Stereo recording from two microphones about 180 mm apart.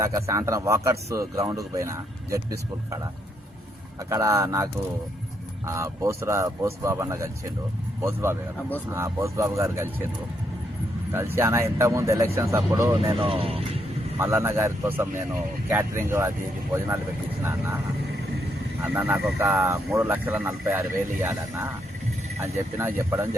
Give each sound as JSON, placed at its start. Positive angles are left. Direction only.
{"t": 0.0, "sound": "speech", "side_deg": -15}
{"t": 4.1, "sound": "speech", "side_deg": -15}
{"t": 11.1, "sound": "speech", "side_deg": -15}
{"t": 13.1, "sound": "speech", "side_deg": -30}
{"t": 14.2, "sound": "speech", "side_deg": -15}
{"t": 18.9, "sound": "speech", "side_deg": -10}